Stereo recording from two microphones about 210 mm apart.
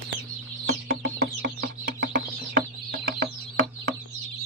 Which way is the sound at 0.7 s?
45° right (ahead or behind).